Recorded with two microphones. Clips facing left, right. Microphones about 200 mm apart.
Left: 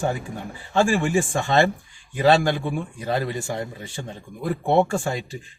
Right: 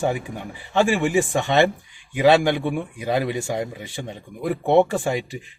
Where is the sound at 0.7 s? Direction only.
20° right (ahead or behind).